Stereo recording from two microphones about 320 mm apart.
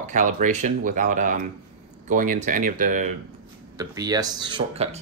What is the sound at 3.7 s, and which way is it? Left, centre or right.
Speech, centre.